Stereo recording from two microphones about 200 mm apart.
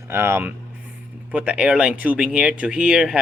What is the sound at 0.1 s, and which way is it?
Speech, 10° right (ahead or behind).